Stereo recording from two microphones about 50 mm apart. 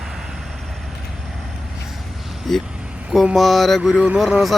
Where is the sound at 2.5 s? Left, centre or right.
Centre.